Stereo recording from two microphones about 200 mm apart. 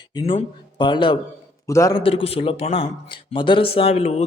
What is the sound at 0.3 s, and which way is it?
A man's voice, 25° left (ahead or behind).